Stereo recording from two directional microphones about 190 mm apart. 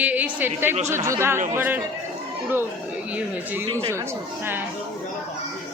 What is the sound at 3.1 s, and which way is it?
Speech, 10° right (ahead or behind).